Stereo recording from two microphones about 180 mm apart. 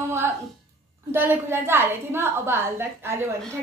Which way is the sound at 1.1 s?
10° right (ahead or behind).